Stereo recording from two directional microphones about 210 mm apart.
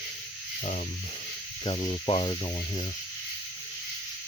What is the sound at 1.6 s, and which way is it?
Speech, 25° left (ahead or behind).